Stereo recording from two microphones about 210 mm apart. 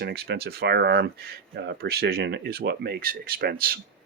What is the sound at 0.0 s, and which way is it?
Speech, 50° right (ahead or behind).